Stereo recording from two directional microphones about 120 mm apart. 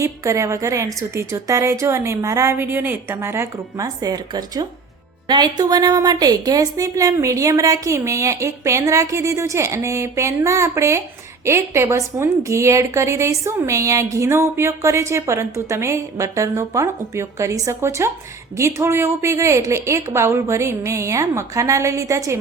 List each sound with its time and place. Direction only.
0.0 s a woman's voice: 25° right (ahead or behind)